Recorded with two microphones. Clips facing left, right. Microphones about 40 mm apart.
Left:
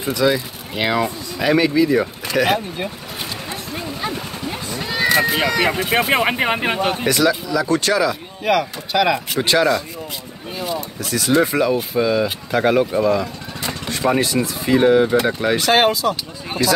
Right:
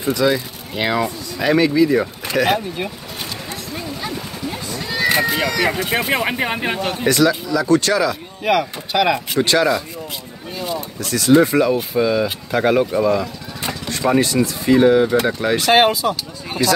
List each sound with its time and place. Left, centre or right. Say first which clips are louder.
0.0 s speech: right 1 dB; centre
3.7 s cat: left 2 dB; left
5.4 s speech: left 1 dB; left
7.1 s speech: right 4 dB; centre
8.5 s speech: even; centre
9.4 s speech: even; centre
13.7 s speech: even; centre
15.6 s speech: right 2 dB; centre
16.4 s a sound: right 1 dB; centre